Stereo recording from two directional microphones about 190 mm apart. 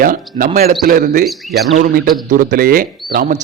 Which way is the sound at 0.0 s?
45° right (ahead or behind).